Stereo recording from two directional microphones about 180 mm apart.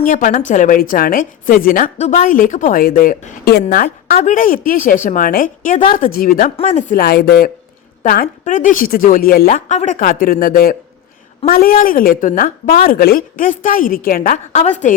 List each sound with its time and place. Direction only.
0.0 s a woman's voice: 45° left (ahead or behind)
6.6 s a woman's voice: 40° left (ahead or behind)